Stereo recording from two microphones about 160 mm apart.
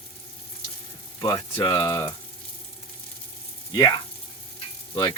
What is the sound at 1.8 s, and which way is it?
Speech, 15° left (ahead or behind).